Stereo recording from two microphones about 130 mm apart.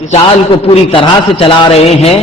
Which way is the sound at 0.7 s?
45° left (ahead or behind).